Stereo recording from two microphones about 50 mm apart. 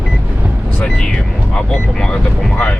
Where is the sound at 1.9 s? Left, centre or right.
Centre.